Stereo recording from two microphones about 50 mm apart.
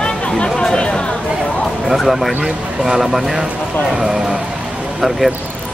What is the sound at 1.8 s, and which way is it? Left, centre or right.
Speech, centre.